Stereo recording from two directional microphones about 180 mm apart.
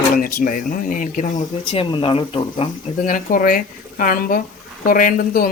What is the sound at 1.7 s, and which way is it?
Speech, 30° left (ahead or behind).